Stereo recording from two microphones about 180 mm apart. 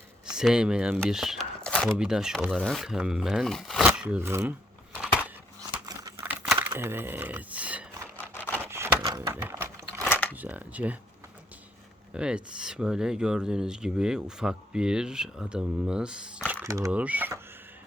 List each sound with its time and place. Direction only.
0.3 s speech: 5° right (ahead or behind)
5.8 s crumpling: 20° right (ahead or behind)
6.2 s computer keyboard: 5° right (ahead or behind)
6.7 s a sound: 10° right (ahead or behind)
10.1 s a sound: 10° left (ahead or behind)
10.3 s speech: 10° right (ahead or behind)
12.1 s speech: 5° right (ahead or behind)
16.6 s speech: 15° right (ahead or behind)